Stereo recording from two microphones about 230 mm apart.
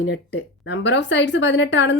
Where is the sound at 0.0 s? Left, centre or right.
Left.